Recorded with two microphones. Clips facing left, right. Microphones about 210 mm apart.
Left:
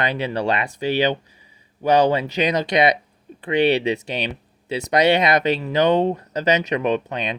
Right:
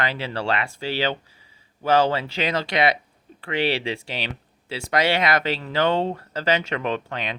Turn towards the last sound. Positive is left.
turn(degrees=20)  # may be behind; listen again after turning